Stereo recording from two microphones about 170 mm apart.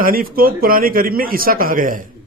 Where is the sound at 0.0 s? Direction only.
55° right (ahead or behind).